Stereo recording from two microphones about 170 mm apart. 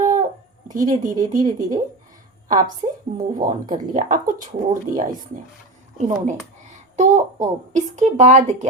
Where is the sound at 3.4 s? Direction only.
55° right (ahead or behind).